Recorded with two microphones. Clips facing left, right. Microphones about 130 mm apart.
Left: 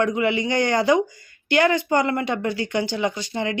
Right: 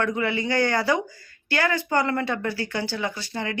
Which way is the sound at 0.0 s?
15° left (ahead or behind).